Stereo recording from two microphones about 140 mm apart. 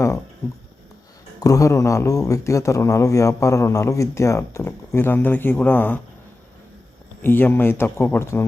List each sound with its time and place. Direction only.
1.4 s speech: 25° left (ahead or behind)
7.2 s speech: 15° left (ahead or behind)